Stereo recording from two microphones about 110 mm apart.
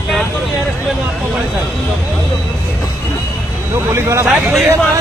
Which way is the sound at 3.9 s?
25° right (ahead or behind).